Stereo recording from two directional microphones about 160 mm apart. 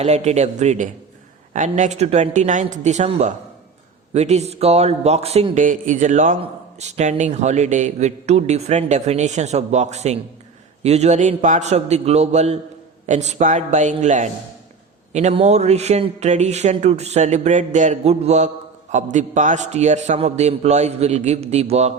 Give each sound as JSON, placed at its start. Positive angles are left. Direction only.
{"t": 0.0, "sound": "a man's voice", "side_deg": -45}
{"t": 5.6, "sound": "speech", "side_deg": -55}